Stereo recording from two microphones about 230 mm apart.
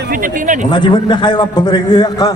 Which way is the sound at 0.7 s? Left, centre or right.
Centre.